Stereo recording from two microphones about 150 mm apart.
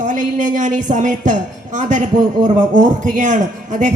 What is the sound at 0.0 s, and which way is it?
A woman's voice, 55° right (ahead or behind).